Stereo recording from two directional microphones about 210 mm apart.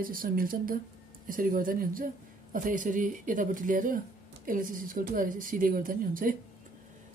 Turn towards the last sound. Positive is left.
turn(degrees=-40)  # may be behind; listen again after turning